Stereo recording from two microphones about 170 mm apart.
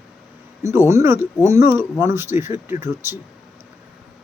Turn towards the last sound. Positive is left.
turn(degrees=-15)  # may be behind; listen again after turning